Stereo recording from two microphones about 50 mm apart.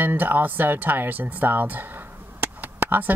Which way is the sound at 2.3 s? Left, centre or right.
Right.